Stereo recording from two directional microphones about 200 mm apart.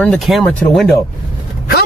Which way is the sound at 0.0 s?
Centre (ahead or behind).